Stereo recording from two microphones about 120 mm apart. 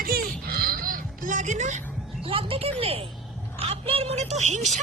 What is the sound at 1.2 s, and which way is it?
Music, 90° right.